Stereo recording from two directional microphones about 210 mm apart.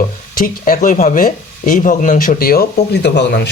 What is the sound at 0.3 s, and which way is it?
Speech, 40° left (ahead or behind).